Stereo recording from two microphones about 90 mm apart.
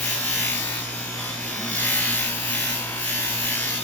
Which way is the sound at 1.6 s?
20° left (ahead or behind).